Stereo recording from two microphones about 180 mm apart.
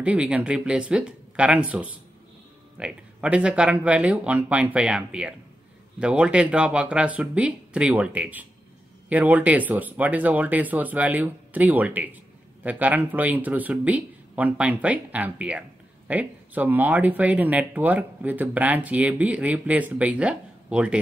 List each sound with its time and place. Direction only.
0.0 s speech: 5° right (ahead or behind)